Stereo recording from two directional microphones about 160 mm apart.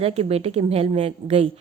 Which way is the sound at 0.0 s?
40° right (ahead or behind).